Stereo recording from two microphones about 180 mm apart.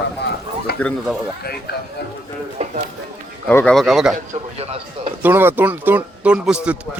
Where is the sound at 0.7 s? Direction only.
65° left (ahead or behind).